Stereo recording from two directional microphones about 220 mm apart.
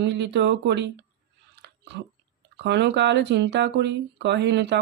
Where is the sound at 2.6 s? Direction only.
50° right (ahead or behind).